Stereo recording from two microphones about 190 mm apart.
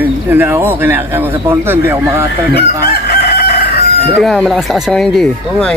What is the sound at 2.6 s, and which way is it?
Chicken, 55° left (ahead or behind).